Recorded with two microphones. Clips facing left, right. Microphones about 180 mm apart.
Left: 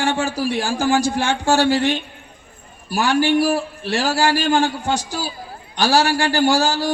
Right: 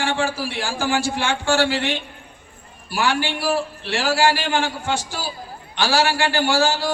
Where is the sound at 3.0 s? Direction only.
40° left (ahead or behind).